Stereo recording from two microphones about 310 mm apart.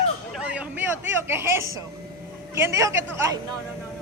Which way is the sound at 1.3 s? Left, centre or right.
Centre.